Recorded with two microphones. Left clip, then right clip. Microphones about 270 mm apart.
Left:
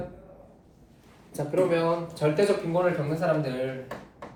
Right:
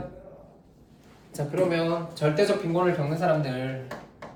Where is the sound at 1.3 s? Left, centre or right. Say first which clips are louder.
Left 1 dB; centre.